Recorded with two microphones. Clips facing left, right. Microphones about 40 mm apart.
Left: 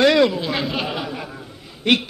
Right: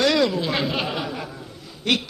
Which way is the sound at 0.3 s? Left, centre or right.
Centre.